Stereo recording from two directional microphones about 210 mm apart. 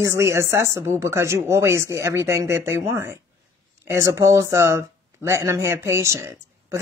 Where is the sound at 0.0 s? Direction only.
15° right (ahead or behind).